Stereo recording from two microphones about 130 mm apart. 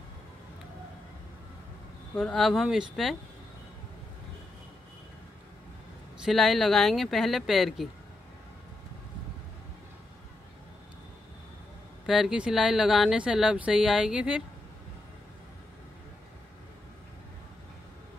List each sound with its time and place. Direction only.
2.1 s speech: centre (ahead or behind)
6.2 s speech: centre (ahead or behind)
12.1 s speech: 5° right (ahead or behind)